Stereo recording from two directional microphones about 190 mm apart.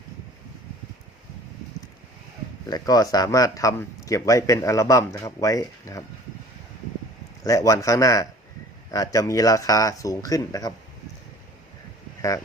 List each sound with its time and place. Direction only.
2.6 s a man's voice: 20° left (ahead or behind)
7.4 s a man's voice: 15° left (ahead or behind)